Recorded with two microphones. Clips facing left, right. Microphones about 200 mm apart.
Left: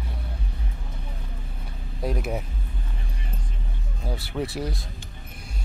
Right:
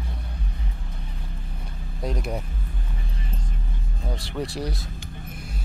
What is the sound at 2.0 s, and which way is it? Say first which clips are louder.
Speech: left 1 dB; 5° left (ahead or behind).